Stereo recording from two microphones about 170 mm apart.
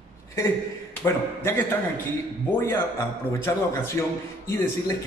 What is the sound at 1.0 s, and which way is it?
Speech, 15° left (ahead or behind).